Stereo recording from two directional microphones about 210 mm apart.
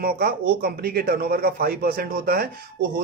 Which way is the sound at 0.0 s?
45° right (ahead or behind).